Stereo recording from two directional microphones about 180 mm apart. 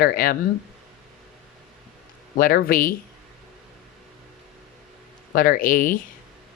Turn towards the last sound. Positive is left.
turn(degrees=50)  # may be behind; listen again after turning